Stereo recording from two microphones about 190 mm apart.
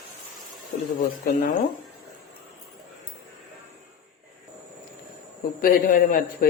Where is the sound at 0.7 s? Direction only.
50° left (ahead or behind).